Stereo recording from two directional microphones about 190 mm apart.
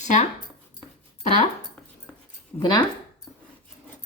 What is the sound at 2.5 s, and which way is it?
Speech, 20° left (ahead or behind).